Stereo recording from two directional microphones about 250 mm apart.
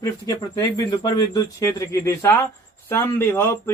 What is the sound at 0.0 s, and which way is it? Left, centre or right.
A man's voice, centre.